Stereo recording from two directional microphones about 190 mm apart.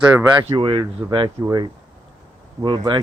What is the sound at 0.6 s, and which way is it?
Speech, 25° right (ahead or behind).